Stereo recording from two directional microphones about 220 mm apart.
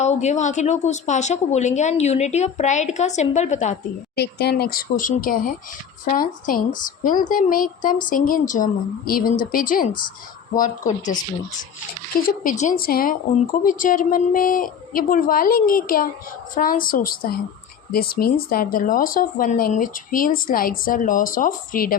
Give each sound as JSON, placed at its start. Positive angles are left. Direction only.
{"t": 0.0, "sound": "speech", "side_deg": 30}
{"t": 4.1, "sound": "speech", "side_deg": 45}
{"t": 12.4, "sound": "speech", "side_deg": 35}